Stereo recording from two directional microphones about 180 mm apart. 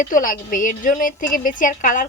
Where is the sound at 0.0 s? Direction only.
50° left (ahead or behind).